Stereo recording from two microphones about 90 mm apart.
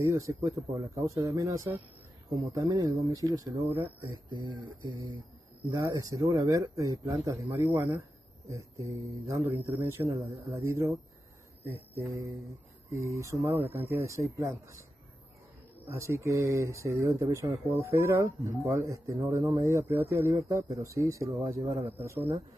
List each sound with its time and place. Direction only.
0.0 s speech: 35° right (ahead or behind)
4.3 s speech: 60° right (ahead or behind)
5.7 s speech: 40° right (ahead or behind)
7.5 s speech: 25° right (ahead or behind)
8.5 s speech: 35° right (ahead or behind)
9.4 s speech: 25° right (ahead or behind)
11.7 s speech: 25° right (ahead or behind)
12.1 s speech: 40° right (ahead or behind)
15.9 s speech: 30° right (ahead or behind)